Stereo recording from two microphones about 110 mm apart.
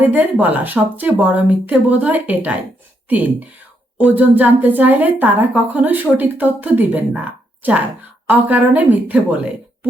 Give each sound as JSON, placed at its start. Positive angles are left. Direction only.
{"t": 0.0, "sound": "a woman's voice", "side_deg": -15}
{"t": 3.9, "sound": "a woman's voice", "side_deg": -15}